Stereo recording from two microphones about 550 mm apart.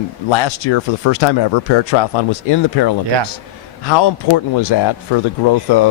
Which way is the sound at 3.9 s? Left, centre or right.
Left.